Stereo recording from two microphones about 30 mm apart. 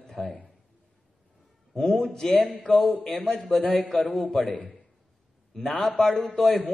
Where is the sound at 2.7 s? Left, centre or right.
Left.